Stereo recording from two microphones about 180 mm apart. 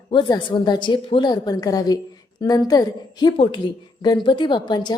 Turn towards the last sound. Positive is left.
turn(degrees=25)  # may be behind; listen again after turning